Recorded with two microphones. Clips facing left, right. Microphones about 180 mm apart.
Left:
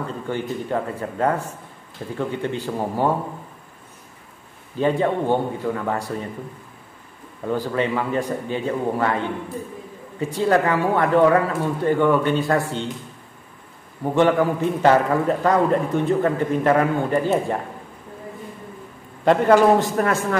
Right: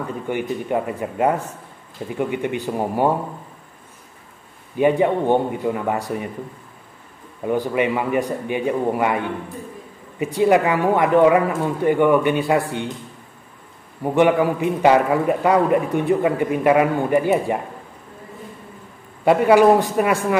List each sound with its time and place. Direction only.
0.0 s a man's voice: 15° right (ahead or behind)
4.7 s a man's voice: 15° right (ahead or behind)
7.4 s a man's voice: 15° right (ahead or behind)
14.1 s a man's voice: 15° right (ahead or behind)
19.2 s a man's voice: 10° right (ahead or behind)